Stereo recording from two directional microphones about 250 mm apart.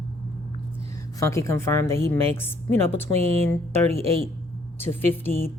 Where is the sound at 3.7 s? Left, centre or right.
Right.